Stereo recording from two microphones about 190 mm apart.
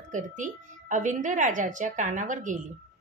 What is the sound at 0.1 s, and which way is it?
A woman's voice, 40° right (ahead or behind).